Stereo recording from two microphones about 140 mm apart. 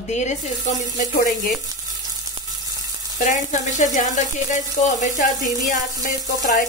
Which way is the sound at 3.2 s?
65° left (ahead or behind).